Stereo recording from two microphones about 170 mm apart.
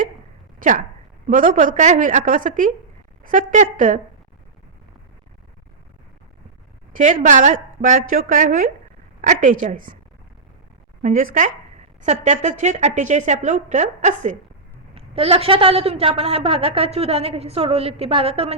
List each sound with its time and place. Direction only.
0.6 s a woman's voice: 55° right (ahead or behind)
6.9 s a woman's voice: 45° right (ahead or behind)
11.0 s a woman's voice: 50° right (ahead or behind)
14.9 s a woman's voice: 35° right (ahead or behind)